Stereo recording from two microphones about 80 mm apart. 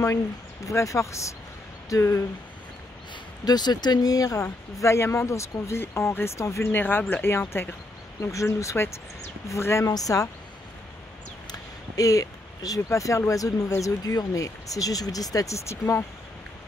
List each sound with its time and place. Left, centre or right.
0.7 s speech: left
3.4 s speech: left
6.7 s speech: left
8.2 s speech: left
9.8 s speech: left
12.0 s speech: left